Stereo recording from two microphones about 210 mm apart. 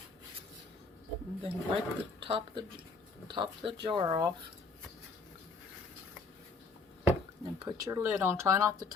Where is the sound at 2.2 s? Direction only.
25° right (ahead or behind).